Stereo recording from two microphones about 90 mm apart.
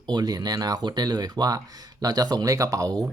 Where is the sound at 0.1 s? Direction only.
50° right (ahead or behind).